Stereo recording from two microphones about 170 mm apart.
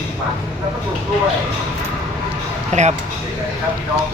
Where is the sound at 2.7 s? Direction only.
45° right (ahead or behind).